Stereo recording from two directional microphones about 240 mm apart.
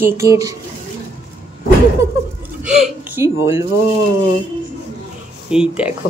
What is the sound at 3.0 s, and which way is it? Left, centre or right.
Speech, centre.